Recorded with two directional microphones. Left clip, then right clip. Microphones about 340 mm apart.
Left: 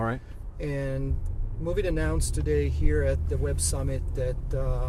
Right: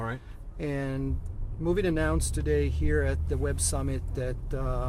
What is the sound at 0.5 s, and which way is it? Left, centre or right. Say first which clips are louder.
Speech: left 1 dB; right.